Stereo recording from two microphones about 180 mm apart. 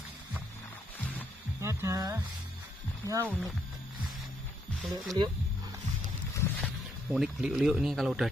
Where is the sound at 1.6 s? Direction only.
15° right (ahead or behind).